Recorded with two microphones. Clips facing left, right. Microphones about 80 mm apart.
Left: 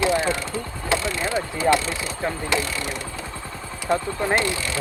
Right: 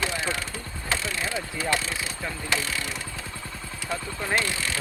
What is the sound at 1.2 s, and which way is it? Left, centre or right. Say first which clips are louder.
Vehicle: left 7 dB; left.